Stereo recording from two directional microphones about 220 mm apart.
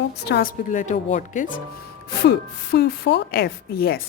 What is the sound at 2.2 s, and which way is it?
Speech, 45° left (ahead or behind).